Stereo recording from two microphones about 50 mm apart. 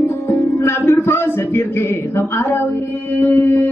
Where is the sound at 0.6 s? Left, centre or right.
Left.